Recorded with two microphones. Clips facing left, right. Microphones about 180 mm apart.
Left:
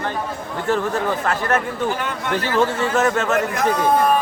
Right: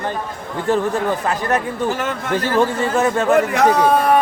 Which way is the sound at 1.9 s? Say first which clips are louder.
Right 2 dB; 45° right (ahead or behind).